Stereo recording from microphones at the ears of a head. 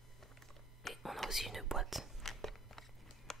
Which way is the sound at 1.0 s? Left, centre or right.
Centre.